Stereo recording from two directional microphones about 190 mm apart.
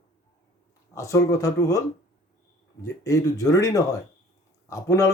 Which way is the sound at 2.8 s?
15° left (ahead or behind).